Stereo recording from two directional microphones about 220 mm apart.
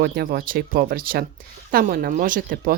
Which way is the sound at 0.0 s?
45° right (ahead or behind).